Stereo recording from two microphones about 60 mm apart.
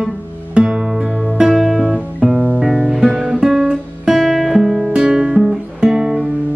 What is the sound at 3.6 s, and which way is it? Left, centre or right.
Guitar, centre.